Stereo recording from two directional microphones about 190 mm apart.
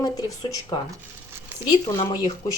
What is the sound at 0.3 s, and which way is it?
Speech, 20° left (ahead or behind).